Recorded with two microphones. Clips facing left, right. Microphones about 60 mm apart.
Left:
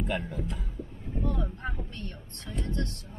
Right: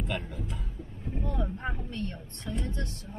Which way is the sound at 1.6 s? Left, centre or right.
Centre.